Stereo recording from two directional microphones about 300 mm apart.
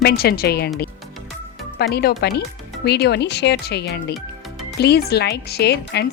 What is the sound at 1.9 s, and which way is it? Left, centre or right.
A woman's voice, left.